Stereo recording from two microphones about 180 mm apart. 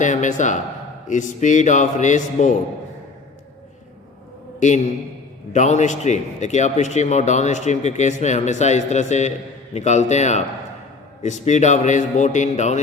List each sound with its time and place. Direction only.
0.0 s a man's voice: 45° left (ahead or behind)
4.6 s a man's voice: 40° left (ahead or behind)